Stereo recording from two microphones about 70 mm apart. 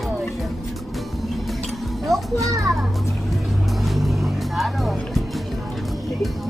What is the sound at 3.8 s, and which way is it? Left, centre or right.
Music, centre.